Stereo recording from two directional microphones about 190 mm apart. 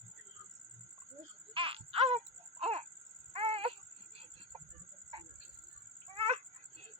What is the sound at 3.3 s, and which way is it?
Wail, 30° right (ahead or behind).